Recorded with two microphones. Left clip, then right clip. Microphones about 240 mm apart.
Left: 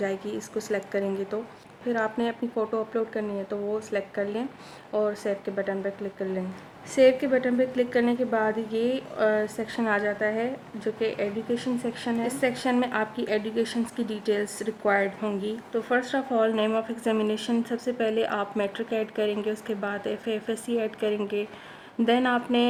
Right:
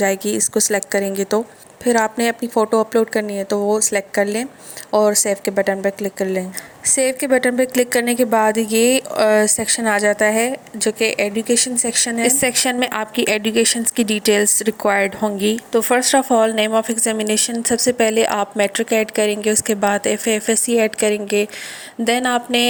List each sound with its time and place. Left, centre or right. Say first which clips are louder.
0.0 s a woman's voice: right 12 dB; right